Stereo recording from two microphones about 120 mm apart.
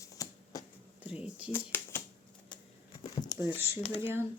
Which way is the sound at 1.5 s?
20° left (ahead or behind).